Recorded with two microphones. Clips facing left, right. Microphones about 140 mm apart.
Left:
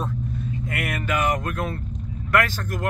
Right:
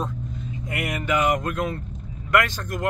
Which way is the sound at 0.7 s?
15° right (ahead or behind).